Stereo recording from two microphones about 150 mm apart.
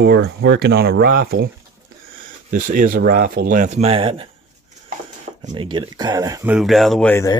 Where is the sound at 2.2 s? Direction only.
65° right (ahead or behind); by 4.3 s 35° right (ahead or behind).